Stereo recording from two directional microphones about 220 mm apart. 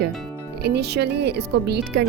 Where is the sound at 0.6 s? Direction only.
50° right (ahead or behind).